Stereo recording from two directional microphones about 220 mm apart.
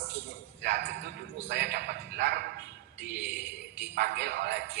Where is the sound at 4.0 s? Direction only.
50° right (ahead or behind).